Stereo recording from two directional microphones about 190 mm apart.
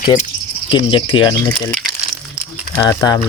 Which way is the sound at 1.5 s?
5° left (ahead or behind).